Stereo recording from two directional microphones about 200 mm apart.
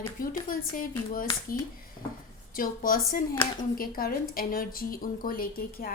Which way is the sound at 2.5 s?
45° left (ahead or behind).